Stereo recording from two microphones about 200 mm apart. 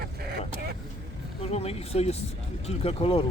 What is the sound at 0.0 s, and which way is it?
Vehicle, 50° right (ahead or behind).